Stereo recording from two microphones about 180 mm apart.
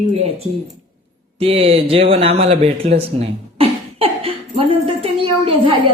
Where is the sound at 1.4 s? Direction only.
35° right (ahead or behind).